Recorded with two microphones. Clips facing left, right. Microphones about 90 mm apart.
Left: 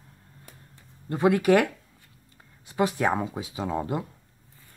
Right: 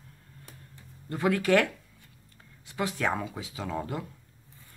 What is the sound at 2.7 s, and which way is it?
Speech, 20° left (ahead or behind).